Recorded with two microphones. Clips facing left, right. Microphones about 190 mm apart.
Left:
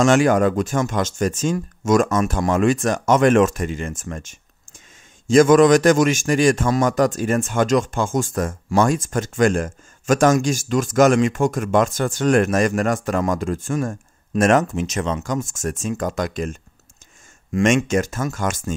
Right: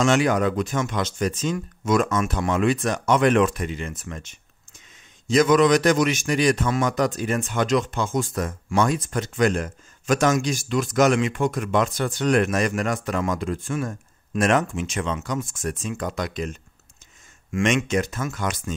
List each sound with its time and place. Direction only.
0.0 s a man's voice: 45° left (ahead or behind)
17.5 s a man's voice: 35° left (ahead or behind)